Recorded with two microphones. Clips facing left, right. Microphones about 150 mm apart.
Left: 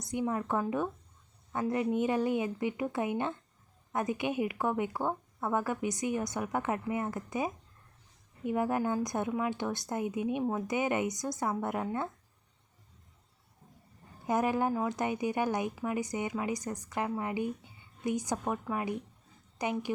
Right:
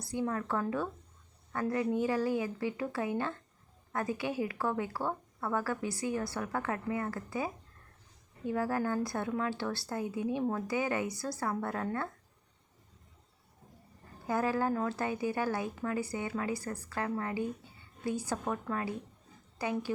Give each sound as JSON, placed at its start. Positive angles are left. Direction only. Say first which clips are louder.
{"t": 0.0, "sound": "a woman's voice", "louder": "left 1 dB", "side_deg": 20}
{"t": 14.3, "sound": "a woman's voice", "louder": "left 2 dB", "side_deg": 20}